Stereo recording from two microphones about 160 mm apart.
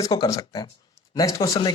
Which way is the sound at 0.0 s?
20° left (ahead or behind).